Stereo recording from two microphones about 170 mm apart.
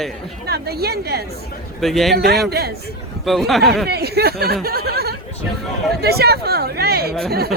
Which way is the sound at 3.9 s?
70° right (ahead or behind).